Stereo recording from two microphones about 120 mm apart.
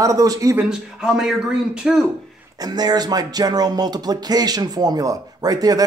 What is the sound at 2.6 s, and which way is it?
Speech, 35° right (ahead or behind).